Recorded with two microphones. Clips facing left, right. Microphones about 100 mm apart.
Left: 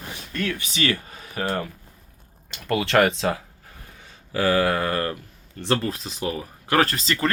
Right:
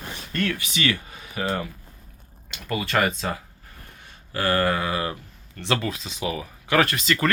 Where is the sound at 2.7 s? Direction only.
70° left (ahead or behind).